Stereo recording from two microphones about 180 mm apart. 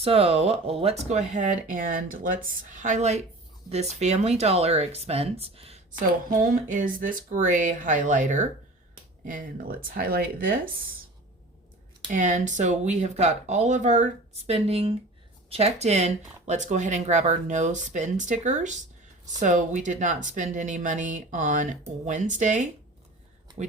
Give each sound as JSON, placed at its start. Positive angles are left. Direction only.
{"t": 0.0, "sound": "speech", "side_deg": -35}
{"t": 5.9, "sound": "speech", "side_deg": -50}
{"t": 12.0, "sound": "speech", "side_deg": -45}